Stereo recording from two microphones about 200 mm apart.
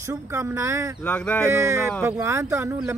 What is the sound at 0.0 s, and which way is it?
Speech, 15° right (ahead or behind).